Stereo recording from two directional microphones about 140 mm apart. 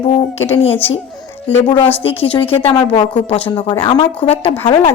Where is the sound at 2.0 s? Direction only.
45° left (ahead or behind).